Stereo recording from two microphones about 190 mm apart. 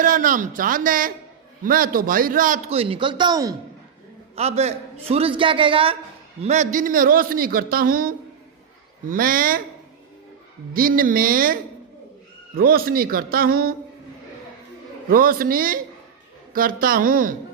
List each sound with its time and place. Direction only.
0.0 s a man's voice: 45° right (ahead or behind)
2.6 s a man's voice: 30° right (ahead or behind)
4.4 s a man's voice: 35° right (ahead or behind)
10.8 s a man's voice: 50° right (ahead or behind)
15.1 s a man's voice: 50° right (ahead or behind)